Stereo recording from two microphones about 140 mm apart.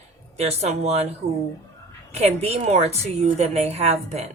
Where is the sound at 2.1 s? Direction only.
45° right (ahead or behind).